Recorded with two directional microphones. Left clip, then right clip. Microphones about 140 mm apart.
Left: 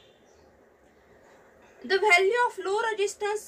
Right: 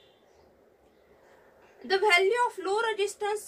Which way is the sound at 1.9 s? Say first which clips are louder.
Left 2 dB; 10° right (ahead or behind).